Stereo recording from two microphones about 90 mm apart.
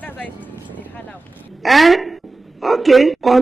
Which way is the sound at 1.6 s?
Centre (ahead or behind).